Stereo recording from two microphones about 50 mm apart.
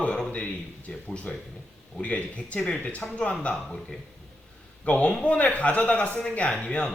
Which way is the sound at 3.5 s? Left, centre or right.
Centre.